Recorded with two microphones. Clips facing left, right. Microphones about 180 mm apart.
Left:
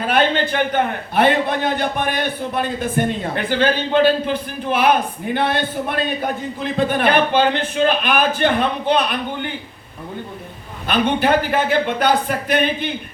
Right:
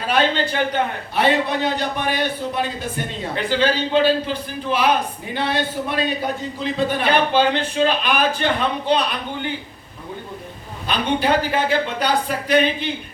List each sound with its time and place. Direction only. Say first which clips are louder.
0.1 s a man's voice: left 1 dB; 55° left (ahead or behind)
10.8 s a man's voice: left 3 dB; 55° left (ahead or behind)